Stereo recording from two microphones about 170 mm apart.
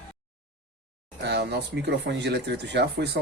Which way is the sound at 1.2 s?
80° right.